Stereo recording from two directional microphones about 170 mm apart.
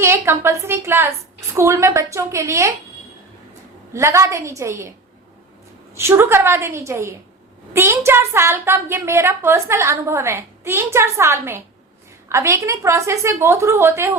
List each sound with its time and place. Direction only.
0.0 s a woman's voice: 15° right (ahead or behind)
3.9 s a woman's voice: 15° right (ahead or behind)
6.0 s a woman's voice: 15° right (ahead or behind)